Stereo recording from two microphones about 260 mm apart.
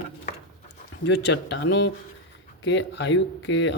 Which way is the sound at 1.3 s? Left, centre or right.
Left.